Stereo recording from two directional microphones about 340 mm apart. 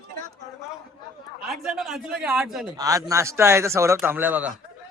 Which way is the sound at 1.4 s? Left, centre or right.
Centre.